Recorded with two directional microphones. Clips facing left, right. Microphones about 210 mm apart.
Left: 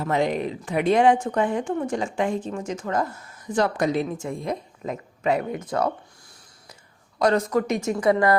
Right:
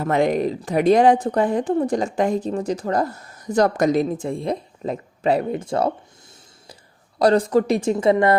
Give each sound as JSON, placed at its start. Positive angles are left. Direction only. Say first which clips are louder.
{"t": 0.0, "sound": "speech", "louder": "right 4 dB", "side_deg": -50}
{"t": 7.2, "sound": "speech", "louder": "right 4 dB", "side_deg": -35}